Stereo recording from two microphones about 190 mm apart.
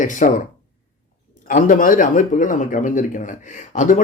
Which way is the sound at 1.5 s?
45° left (ahead or behind).